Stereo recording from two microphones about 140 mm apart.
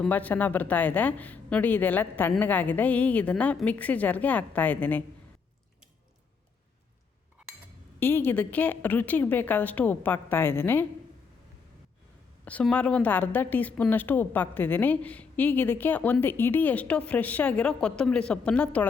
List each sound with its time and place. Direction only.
0.0 s a woman's voice: 10° left (ahead or behind)
7.9 s a woman's voice: 15° left (ahead or behind)
12.5 s a woman's voice: 10° left (ahead or behind)